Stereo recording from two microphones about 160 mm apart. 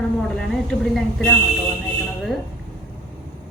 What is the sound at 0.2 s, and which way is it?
A woman's voice, centre (ahead or behind).